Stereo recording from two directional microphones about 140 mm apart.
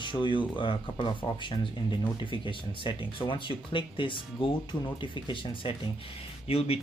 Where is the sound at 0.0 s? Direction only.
35° left (ahead or behind).